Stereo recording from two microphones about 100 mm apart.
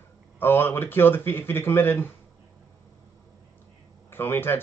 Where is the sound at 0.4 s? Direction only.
20° left (ahead or behind).